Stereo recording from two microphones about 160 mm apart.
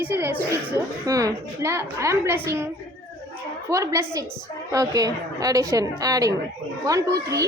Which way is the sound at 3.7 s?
20° right (ahead or behind).